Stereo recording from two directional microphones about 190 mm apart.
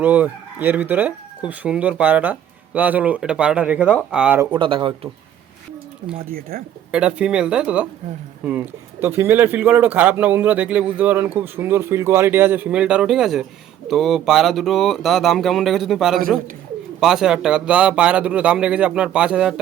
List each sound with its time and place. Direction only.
0.0 s a man's voice: 10° right (ahead or behind)
4.5 s speech: 25° right (ahead or behind)
6.1 s speech: 50° right (ahead or behind)
6.9 s a man's voice: 5° right (ahead or behind)